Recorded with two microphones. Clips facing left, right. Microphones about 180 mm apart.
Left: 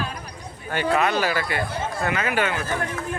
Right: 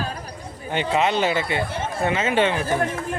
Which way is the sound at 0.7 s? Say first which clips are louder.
Right 1 dB; 20° right (ahead or behind).